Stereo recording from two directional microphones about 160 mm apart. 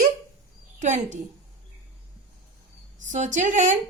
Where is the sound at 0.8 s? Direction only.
50° right (ahead or behind).